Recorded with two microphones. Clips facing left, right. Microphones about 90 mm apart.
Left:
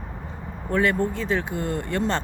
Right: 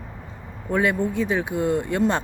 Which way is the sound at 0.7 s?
10° right (ahead or behind).